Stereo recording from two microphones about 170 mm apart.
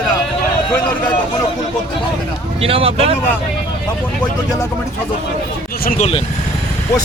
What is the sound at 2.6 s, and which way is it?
Speech, 35° right (ahead or behind).